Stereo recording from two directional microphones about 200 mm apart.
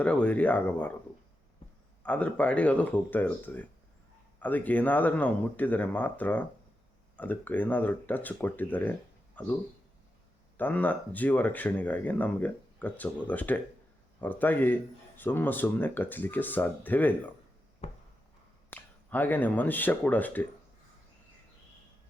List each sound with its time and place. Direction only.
0.0 s speech: 5° left (ahead or behind)
2.0 s speech: 5° left (ahead or behind)
10.6 s speech: 10° left (ahead or behind)
17.8 s a sound: 35° left (ahead or behind)
18.7 s speech: 10° left (ahead or behind)